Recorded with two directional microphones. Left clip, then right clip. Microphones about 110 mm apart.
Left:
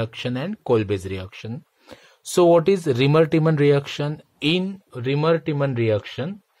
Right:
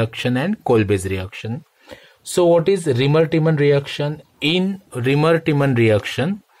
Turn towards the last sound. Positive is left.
turn(degrees=0)  # may be behind; listen again after turning